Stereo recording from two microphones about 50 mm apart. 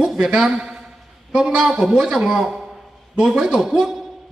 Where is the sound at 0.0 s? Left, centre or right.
Centre.